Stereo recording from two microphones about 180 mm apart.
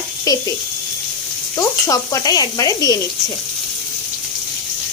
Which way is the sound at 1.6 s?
20° left (ahead or behind).